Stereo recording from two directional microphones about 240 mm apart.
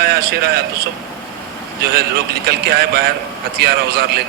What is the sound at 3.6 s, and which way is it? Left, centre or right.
Speech, right.